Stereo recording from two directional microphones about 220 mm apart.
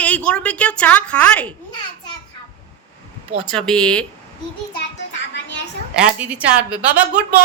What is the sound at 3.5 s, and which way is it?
Speech, 5° left (ahead or behind).